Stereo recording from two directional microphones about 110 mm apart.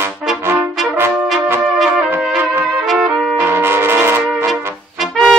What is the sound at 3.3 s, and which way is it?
Brass instrument, 20° right (ahead or behind).